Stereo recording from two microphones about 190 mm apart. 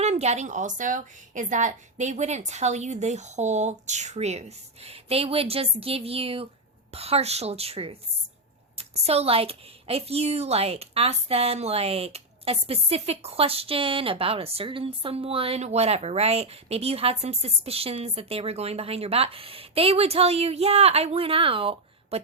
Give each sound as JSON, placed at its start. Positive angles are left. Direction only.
{"t": 0.0, "sound": "a woman's voice", "side_deg": -35}